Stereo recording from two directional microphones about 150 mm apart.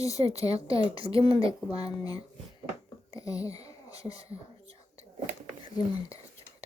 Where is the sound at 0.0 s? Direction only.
20° left (ahead or behind).